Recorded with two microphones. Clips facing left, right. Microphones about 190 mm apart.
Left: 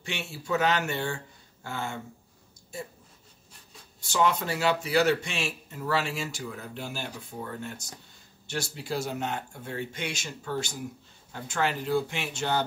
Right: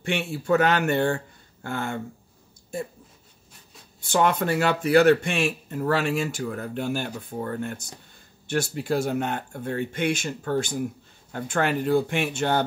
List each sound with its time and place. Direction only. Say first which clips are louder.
0.0 s speech: right 9 dB; 55° right (ahead or behind)
4.0 s speech: right 4 dB; 55° right (ahead or behind)